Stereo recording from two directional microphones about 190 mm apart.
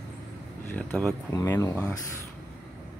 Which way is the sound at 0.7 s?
10° left (ahead or behind).